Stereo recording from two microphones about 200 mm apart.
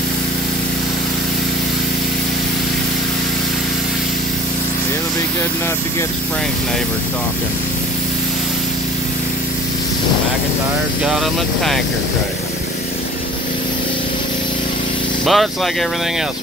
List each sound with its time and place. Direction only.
11.1 s speech: centre (ahead or behind)
15.2 s speech: centre (ahead or behind)